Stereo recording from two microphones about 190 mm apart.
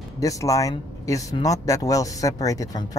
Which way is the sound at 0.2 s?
15° left (ahead or behind).